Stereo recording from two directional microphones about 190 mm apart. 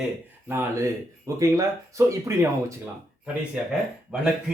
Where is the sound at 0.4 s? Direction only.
10° right (ahead or behind).